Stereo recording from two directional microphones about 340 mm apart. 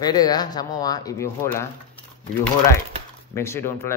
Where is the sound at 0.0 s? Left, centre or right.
Centre.